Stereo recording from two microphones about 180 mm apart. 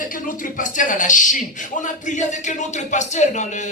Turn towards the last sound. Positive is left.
turn(degrees=40)  # may be behind; listen again after turning